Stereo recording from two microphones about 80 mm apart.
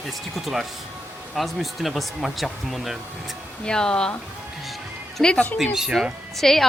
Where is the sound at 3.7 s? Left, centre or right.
Centre.